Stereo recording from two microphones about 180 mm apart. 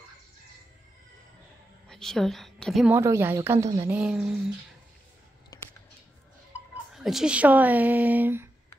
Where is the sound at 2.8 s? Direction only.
15° right (ahead or behind).